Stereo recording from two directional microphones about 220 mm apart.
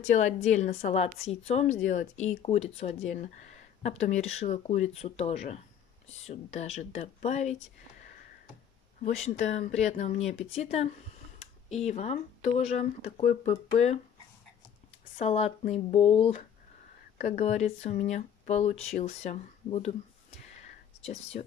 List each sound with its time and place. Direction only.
0.1 s speech: 35° left (ahead or behind)
9.0 s speech: 30° left (ahead or behind)
15.1 s speech: 30° left (ahead or behind)
21.0 s speech: 30° left (ahead or behind)